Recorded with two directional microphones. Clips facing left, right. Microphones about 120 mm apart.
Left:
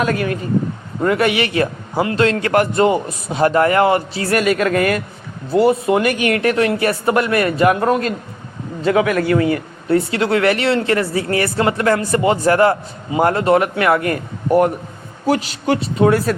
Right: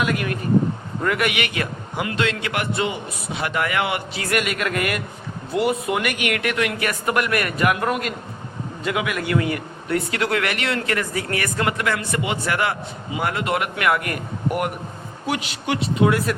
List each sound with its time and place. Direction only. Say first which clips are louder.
0.0 s a man's voice: left 4 dB; 35° left (ahead or behind)